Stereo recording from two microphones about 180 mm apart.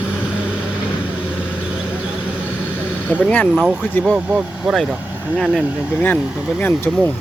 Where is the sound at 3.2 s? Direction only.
5° left (ahead or behind).